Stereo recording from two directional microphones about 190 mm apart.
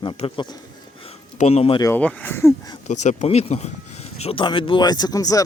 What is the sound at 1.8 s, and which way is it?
Speech, 10° left (ahead or behind).